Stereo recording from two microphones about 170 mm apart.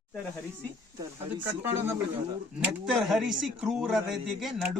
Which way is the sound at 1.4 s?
15° right (ahead or behind).